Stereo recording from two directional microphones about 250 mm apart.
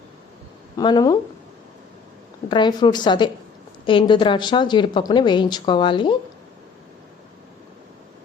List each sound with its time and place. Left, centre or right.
0.8 s speech: centre
2.5 s speech: centre